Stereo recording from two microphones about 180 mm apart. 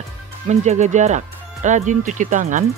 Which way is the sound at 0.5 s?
40° right (ahead or behind).